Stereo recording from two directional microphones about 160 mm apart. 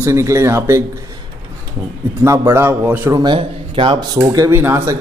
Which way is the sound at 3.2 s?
30° right (ahead or behind).